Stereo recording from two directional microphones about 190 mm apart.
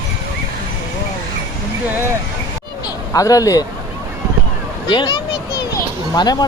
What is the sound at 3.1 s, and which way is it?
Speech, 20° left (ahead or behind).